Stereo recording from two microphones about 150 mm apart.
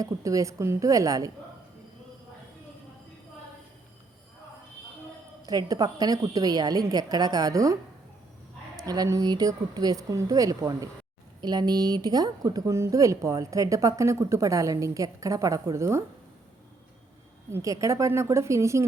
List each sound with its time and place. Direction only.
0.0 s speech: 20° right (ahead or behind)
5.5 s speech: 25° right (ahead or behind)
17.5 s speech: 20° right (ahead or behind)